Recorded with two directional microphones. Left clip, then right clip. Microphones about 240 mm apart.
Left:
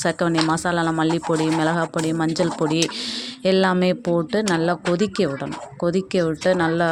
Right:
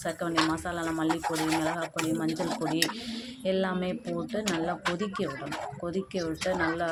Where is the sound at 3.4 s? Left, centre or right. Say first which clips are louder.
Left 11 dB; left.